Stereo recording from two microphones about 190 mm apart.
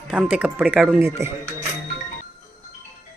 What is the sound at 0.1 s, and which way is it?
Speech, 5° right (ahead or behind).